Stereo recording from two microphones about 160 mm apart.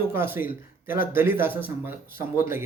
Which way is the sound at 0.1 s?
15° right (ahead or behind).